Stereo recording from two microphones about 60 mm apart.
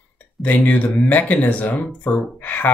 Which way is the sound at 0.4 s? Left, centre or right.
Left.